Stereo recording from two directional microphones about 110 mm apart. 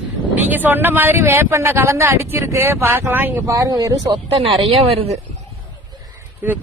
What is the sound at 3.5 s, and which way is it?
Speech, 35° right (ahead or behind).